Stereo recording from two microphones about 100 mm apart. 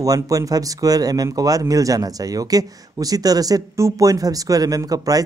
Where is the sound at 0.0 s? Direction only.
35° right (ahead or behind).